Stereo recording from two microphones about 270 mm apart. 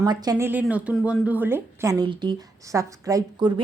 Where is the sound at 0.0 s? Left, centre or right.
Centre.